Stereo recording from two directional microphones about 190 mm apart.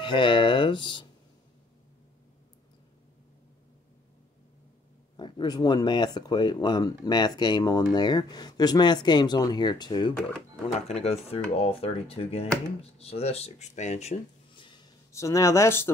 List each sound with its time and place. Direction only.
0.0 s speech: 25° left (ahead or behind)
5.1 s speech: 20° left (ahead or behind)